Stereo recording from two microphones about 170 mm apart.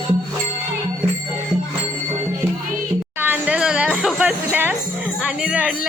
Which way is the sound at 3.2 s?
10° right (ahead or behind).